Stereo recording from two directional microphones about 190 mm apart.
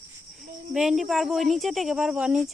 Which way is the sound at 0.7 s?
Centre (ahead or behind).